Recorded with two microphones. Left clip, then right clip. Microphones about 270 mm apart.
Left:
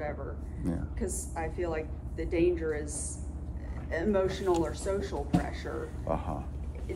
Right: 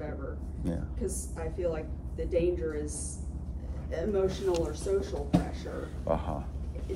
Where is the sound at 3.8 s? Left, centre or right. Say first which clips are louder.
Left 1 dB; centre.